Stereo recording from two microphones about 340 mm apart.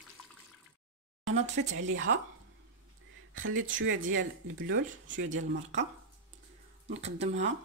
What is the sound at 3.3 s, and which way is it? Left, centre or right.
Speech, right.